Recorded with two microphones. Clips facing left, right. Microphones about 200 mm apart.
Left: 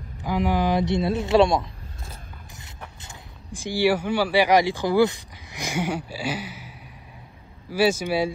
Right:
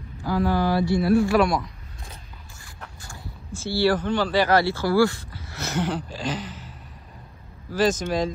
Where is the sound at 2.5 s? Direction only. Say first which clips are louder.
Even; 20° left (ahead or behind).